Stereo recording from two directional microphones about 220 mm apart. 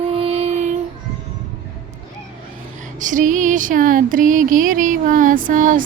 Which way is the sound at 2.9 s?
35° right (ahead or behind).